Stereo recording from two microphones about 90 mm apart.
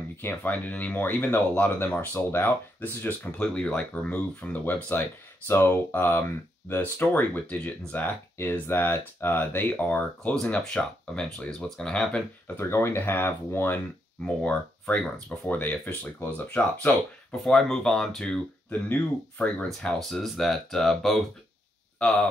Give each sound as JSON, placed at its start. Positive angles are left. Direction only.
{"t": 0.2, "sound": "speech", "side_deg": 20}
{"t": 12.5, "sound": "speech", "side_deg": 30}
{"t": 14.2, "sound": "speech", "side_deg": 15}
{"t": 17.3, "sound": "speech", "side_deg": 5}
{"t": 19.8, "sound": "speech", "side_deg": 5}